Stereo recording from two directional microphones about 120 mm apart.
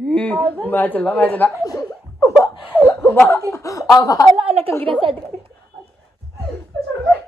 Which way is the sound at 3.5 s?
25° left (ahead or behind).